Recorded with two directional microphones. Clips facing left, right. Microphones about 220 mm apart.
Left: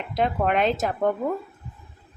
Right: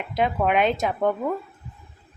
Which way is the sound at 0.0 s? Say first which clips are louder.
Right 1 dB; 5° right (ahead or behind).